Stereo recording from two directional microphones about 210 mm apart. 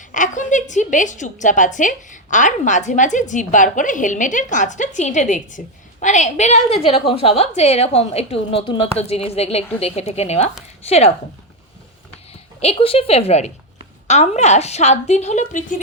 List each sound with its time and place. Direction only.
0.1 s a woman's voice: 35° left (ahead or behind)
12.5 s a woman's voice: 30° left (ahead or behind)